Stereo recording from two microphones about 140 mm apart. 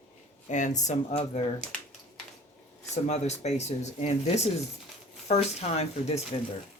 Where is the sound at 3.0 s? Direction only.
55° left (ahead or behind).